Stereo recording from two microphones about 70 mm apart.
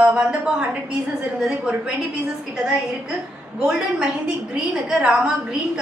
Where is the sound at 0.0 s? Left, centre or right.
Centre.